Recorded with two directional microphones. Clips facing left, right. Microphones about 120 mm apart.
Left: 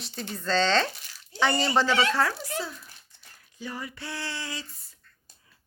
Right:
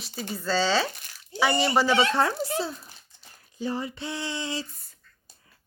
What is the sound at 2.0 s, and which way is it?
Female singing, 25° right (ahead or behind).